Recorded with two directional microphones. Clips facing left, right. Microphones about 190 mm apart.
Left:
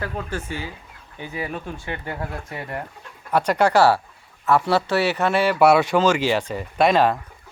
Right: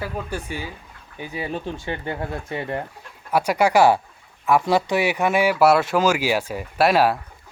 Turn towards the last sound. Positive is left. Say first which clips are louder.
# even
turn(degrees=-5)  # may be behind; listen again after turning